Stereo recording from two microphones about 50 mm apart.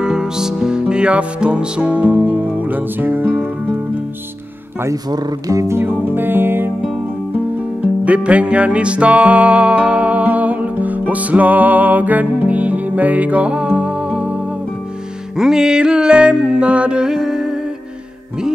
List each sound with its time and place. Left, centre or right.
0.0 s music: centre; by 3.3 s right
5.5 s music: right
5.9 s music: right
7.3 s music: right
15.3 s music: centre